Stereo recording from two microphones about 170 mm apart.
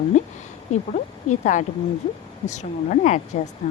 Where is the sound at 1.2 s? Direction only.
45° left (ahead or behind).